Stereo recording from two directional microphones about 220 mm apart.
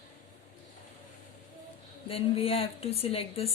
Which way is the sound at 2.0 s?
25° left (ahead or behind).